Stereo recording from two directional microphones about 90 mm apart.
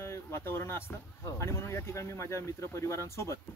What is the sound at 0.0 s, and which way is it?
Speech, 30° left (ahead or behind).